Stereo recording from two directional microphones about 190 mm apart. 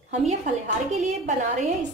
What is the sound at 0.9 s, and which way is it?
Speech, 40° right (ahead or behind).